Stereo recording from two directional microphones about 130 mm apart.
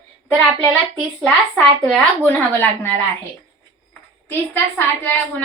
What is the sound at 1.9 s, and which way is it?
A woman's voice, 15° left (ahead or behind).